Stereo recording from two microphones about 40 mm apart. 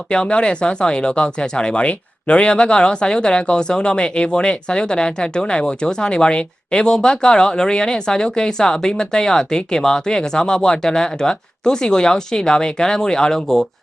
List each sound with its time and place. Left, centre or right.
0.1 s speech: left